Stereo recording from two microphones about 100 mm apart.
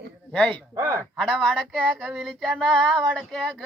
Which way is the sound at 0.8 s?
30° right (ahead or behind).